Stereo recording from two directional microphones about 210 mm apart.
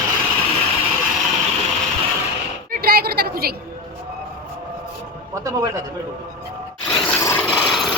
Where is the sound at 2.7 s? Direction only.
45° right (ahead or behind).